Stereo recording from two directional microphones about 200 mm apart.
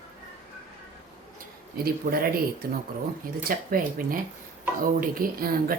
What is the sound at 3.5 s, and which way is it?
Dishes, 45° right (ahead or behind).